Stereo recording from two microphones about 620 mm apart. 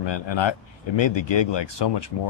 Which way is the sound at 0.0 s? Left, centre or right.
Left.